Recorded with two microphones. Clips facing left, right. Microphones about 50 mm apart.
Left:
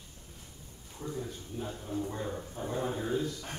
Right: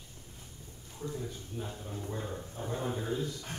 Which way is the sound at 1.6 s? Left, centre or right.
Centre.